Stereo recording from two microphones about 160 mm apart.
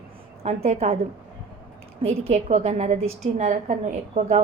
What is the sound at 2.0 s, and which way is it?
A woman's voice, 40° right (ahead or behind).